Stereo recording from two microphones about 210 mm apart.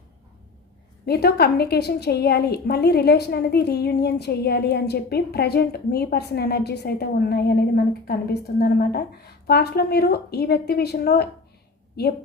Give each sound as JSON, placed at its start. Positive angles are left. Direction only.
{"t": 1.0, "sound": "a woman's voice", "side_deg": 50}